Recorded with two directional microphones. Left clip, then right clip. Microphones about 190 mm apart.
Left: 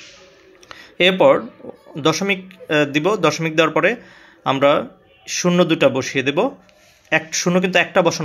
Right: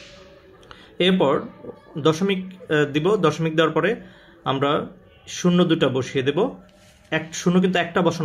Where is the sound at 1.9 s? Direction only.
15° left (ahead or behind).